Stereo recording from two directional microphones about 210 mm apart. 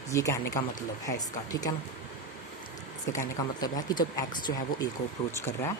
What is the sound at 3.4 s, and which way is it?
Speech, 20° left (ahead or behind).